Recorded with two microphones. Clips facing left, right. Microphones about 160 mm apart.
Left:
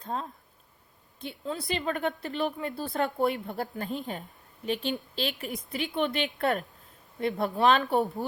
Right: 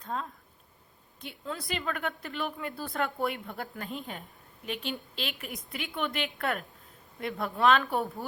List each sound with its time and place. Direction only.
0.0 s a woman's voice: 35° left (ahead or behind)